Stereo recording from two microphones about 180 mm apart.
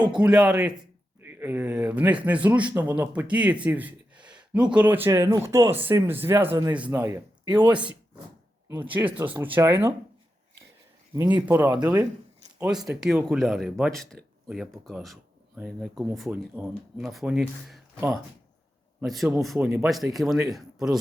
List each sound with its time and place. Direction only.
0.0 s speech: 5° right (ahead or behind)
7.4 s speech: 25° right (ahead or behind)
8.6 s speech: 15° right (ahead or behind)
11.1 s speech: 15° right (ahead or behind)
12.5 s speech: 5° right (ahead or behind)